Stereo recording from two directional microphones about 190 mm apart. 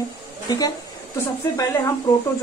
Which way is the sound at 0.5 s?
20° left (ahead or behind).